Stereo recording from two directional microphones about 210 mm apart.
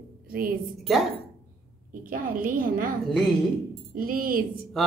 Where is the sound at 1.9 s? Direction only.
40° right (ahead or behind).